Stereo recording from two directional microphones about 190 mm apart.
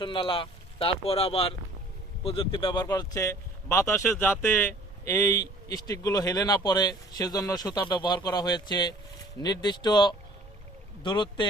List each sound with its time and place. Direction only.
0.0 s speech: 25° left (ahead or behind)